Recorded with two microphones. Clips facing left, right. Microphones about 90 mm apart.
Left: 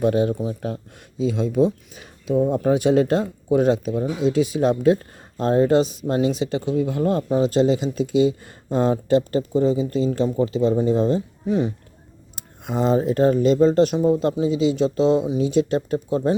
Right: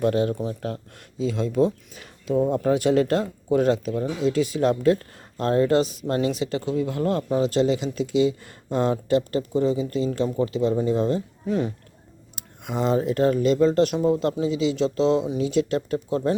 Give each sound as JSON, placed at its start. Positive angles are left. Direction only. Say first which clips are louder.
{"t": 0.0, "sound": "speech", "louder": "left 2 dB", "side_deg": 20}